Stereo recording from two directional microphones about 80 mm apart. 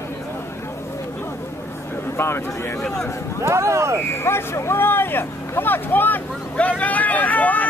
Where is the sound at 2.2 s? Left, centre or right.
Left.